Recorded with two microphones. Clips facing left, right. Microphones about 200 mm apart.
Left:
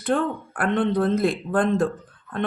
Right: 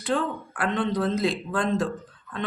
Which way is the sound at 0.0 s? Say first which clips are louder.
Left 3 dB; 55° left (ahead or behind).